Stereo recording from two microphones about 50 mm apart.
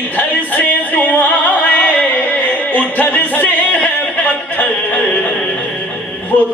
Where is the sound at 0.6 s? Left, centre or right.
Left.